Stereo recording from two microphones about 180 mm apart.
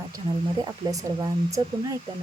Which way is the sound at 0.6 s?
20° right (ahead or behind).